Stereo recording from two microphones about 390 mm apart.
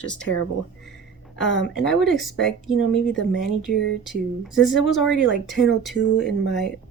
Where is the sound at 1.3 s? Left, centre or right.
Left.